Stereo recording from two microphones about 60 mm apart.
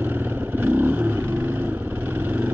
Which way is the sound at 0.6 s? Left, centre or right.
Right.